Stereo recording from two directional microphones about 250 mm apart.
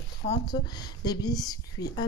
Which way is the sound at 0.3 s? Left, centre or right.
Centre.